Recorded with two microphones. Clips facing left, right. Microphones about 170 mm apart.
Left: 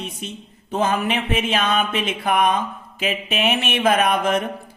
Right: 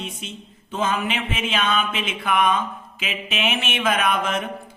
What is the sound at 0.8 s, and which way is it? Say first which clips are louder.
Speech: left 3 dB; 40° left (ahead or behind).